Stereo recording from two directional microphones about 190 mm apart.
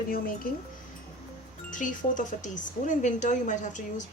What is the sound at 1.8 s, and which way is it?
Speech, 40° left (ahead or behind).